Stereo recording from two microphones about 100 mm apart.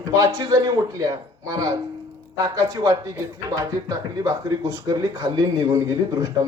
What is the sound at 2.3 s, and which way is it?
Speech, 35° right (ahead or behind).